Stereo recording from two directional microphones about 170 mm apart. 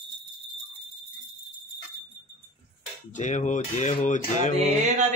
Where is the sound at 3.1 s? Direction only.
45° left (ahead or behind).